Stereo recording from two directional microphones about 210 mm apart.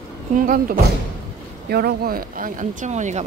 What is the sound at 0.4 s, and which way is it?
Speech, 40° right (ahead or behind).